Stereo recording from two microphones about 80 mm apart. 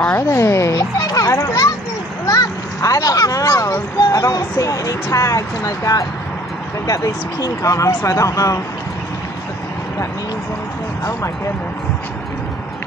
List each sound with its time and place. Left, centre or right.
0.2 s children playing: left
2.2 s a child's voice: left